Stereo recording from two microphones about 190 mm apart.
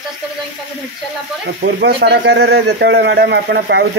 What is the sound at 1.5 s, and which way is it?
Speech, 60° right (ahead or behind).